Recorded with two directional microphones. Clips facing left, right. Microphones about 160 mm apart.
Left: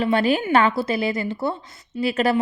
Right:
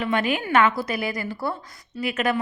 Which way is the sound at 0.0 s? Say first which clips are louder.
Left 4 dB; 35° left (ahead or behind).